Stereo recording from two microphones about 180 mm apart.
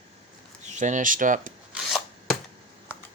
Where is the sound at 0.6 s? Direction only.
40° right (ahead or behind).